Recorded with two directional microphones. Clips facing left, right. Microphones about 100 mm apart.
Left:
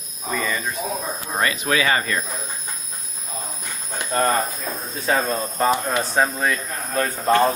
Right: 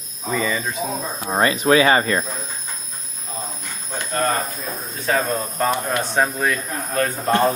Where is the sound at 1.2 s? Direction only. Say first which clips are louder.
Right 7 dB; 25° right (ahead or behind).